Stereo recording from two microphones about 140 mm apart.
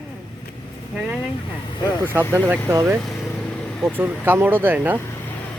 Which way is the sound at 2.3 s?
15° right (ahead or behind).